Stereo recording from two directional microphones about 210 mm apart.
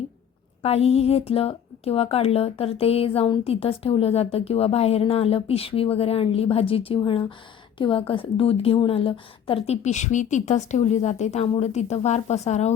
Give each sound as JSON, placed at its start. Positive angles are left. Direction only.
{"t": 0.6, "sound": "speech", "side_deg": 30}